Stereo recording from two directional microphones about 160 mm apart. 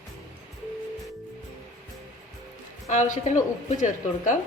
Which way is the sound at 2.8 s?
45° left (ahead or behind).